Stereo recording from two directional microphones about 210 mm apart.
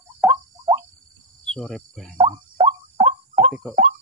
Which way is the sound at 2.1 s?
25° right (ahead or behind).